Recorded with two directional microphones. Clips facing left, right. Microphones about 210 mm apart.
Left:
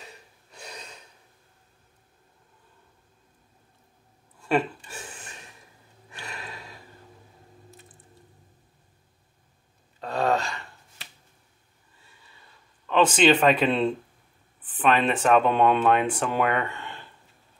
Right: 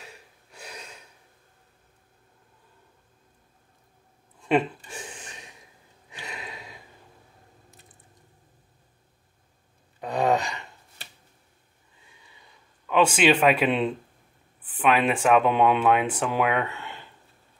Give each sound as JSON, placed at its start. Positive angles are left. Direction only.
{"t": 0.0, "sound": "gasp", "side_deg": -10}
{"t": 4.4, "sound": "gasp", "side_deg": -20}
{"t": 9.9, "sound": "gasp", "side_deg": -15}
{"t": 12.4, "sound": "a sound", "side_deg": -10}
{"t": 14.6, "sound": "speech", "side_deg": -10}